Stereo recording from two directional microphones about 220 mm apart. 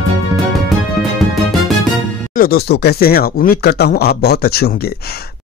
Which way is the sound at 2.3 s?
45° left (ahead or behind).